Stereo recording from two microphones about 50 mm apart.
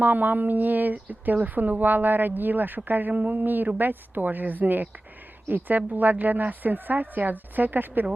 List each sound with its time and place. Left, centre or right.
0.0 s speech: right